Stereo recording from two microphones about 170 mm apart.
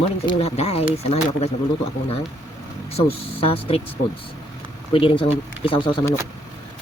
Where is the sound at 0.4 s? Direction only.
40° left (ahead or behind).